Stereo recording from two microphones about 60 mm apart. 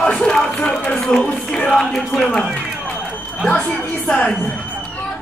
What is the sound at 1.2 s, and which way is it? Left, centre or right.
Music, left.